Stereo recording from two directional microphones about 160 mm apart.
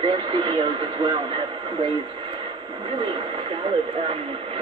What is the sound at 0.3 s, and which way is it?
Speech, 30° right (ahead or behind).